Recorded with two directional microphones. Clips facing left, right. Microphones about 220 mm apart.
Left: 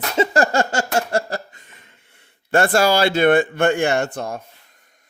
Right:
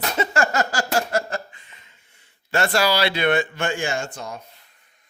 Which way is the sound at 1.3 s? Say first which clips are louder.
Left 2 dB; 45° left (ahead or behind).